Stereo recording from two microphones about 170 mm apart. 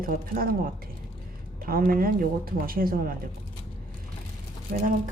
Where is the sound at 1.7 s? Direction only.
55° right (ahead or behind).